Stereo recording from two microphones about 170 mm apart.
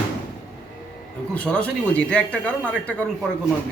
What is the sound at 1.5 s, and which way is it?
A man's voice, 5° left (ahead or behind).